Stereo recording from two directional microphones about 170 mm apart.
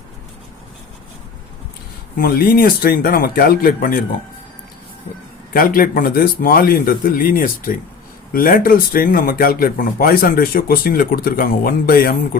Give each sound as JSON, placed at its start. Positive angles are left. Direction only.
{"t": 2.1, "sound": "speech", "side_deg": 60}
{"t": 5.5, "sound": "speech", "side_deg": 55}